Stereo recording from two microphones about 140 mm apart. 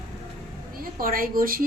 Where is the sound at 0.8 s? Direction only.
90° right.